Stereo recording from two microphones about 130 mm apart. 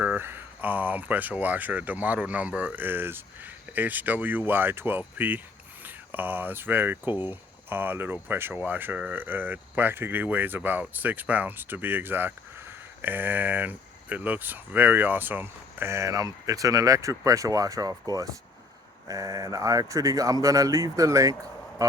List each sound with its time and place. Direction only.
0.0 s speech: 15° right (ahead or behind)